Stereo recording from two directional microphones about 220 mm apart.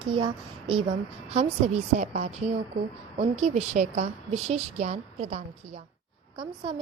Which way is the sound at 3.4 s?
30° right (ahead or behind).